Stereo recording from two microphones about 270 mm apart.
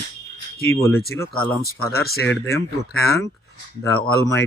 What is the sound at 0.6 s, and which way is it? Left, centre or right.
Speech, centre.